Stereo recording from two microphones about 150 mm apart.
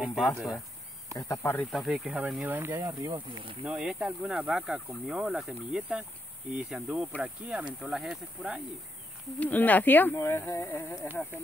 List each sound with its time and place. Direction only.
0.1 s speech: centre (ahead or behind)
1.1 s speech: 15° left (ahead or behind)
1.6 s speech: centre (ahead or behind); by 3.1 s 15° right (ahead or behind)
3.1 s speech: 30° right (ahead or behind)
3.6 s speech: 5° right (ahead or behind)
9.4 s speech: 10° left (ahead or behind)